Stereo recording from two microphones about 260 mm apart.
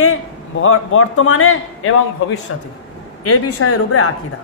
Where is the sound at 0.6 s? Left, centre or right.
Left.